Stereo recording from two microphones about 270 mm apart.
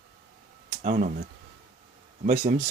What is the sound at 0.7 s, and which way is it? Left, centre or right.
Speech, right.